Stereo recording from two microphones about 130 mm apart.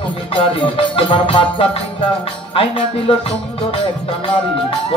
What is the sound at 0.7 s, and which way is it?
Music, 45° left (ahead or behind).